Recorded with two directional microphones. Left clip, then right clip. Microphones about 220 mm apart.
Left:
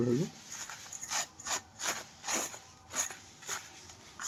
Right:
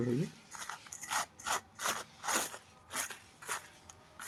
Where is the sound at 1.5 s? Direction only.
5° right (ahead or behind).